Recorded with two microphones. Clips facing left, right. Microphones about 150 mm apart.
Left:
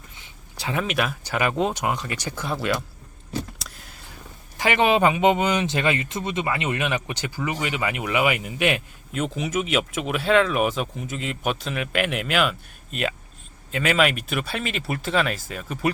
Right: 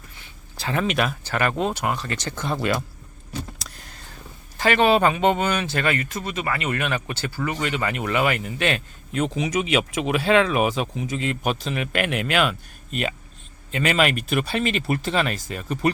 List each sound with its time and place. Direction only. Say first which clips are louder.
0.5 s a sound: right 1 dB; 15° left (ahead or behind)
0.8 s speech: right 2 dB; 5° left (ahead or behind)
3.6 s vehicle: right 1 dB; centre (ahead or behind)
4.5 s speech: right 2 dB; 15° left (ahead or behind)
9.1 s speech: right 2 dB; centre (ahead or behind)